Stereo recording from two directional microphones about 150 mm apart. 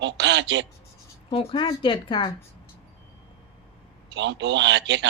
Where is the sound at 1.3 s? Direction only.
35° left (ahead or behind).